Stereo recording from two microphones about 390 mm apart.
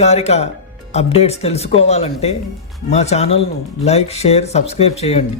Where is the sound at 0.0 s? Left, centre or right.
Centre.